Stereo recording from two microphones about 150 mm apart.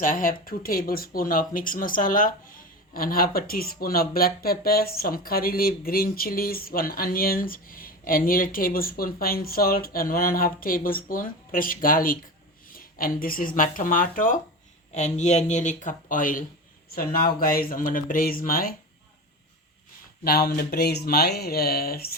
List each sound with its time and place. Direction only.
0.0 s speech: 65° left (ahead or behind)
14.9 s speech: 50° left (ahead or behind)
16.9 s speech: 75° left (ahead or behind)
20.2 s speech: 90° left